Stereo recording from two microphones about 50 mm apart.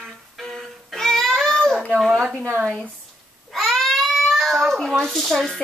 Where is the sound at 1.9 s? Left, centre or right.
Centre.